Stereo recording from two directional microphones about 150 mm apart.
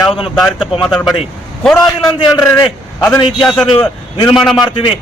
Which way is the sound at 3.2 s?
35° left (ahead or behind).